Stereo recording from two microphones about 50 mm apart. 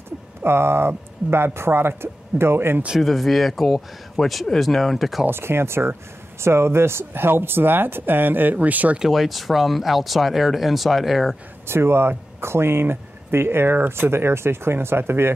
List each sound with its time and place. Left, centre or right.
0.4 s speech: right
3.0 s speech: centre
5.3 s speech: right
9.1 s speech: centre
11.6 s speech: right